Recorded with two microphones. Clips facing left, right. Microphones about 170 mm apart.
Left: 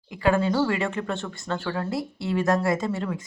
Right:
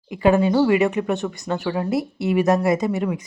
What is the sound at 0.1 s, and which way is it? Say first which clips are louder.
Speech: right 5 dB; 20° right (ahead or behind).